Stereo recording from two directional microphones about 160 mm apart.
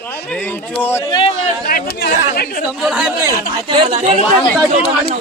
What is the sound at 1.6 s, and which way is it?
Speech, 70° left (ahead or behind).